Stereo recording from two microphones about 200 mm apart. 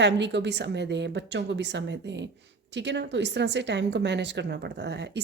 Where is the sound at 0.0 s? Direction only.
60° right (ahead or behind).